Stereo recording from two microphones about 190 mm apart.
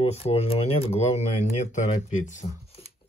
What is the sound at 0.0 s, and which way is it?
Speech, 30° left (ahead or behind).